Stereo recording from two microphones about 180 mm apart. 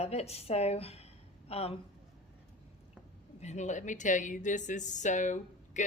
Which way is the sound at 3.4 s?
40° left (ahead or behind).